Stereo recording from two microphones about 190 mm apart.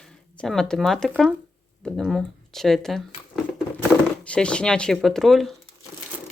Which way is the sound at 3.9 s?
5° left (ahead or behind).